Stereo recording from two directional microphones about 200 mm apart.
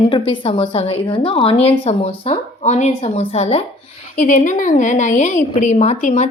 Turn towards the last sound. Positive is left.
turn(degrees=35)  # may be behind; listen again after turning